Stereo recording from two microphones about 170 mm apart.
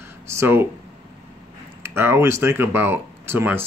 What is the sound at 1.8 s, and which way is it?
Speech, 15° right (ahead or behind).